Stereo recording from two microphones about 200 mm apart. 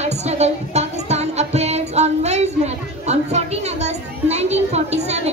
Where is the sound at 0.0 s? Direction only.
35° right (ahead or behind).